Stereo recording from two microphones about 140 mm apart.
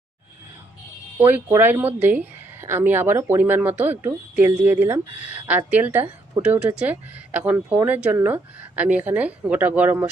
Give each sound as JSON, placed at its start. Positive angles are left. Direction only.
{"t": 1.2, "sound": "speech", "side_deg": -15}